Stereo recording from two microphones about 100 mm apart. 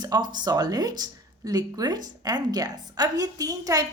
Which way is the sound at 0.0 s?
45° right (ahead or behind).